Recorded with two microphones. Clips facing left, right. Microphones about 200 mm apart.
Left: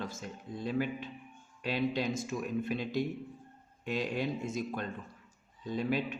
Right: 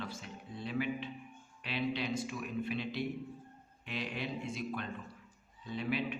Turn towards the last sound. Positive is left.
turn(degrees=45)  # may be behind; listen again after turning